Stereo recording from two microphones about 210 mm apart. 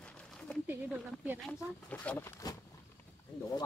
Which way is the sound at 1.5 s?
5° left (ahead or behind).